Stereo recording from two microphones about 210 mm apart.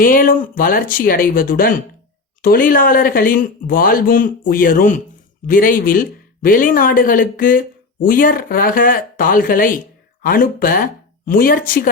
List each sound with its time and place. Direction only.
0.0 s a man's voice: 40° left (ahead or behind)